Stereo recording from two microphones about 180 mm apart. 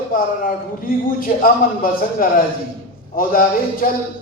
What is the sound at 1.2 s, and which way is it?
A man's voice, 50° left (ahead or behind).